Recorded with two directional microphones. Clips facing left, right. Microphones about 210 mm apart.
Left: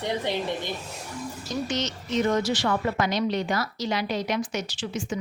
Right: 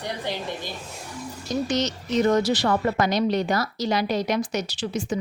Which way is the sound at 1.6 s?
40° right (ahead or behind).